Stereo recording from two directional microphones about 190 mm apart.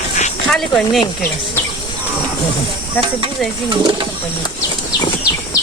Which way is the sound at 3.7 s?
25° right (ahead or behind).